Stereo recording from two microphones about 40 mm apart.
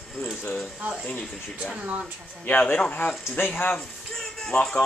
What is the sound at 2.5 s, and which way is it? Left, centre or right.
Speech, left.